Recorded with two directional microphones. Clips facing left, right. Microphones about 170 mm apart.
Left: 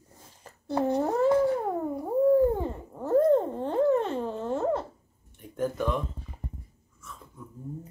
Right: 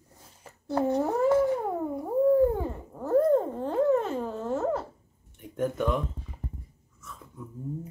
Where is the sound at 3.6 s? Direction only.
5° right (ahead or behind).